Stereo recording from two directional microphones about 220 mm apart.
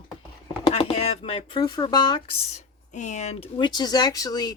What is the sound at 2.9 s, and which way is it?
Speech, 35° left (ahead or behind).